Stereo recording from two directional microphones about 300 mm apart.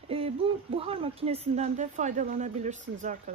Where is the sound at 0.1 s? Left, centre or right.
Centre.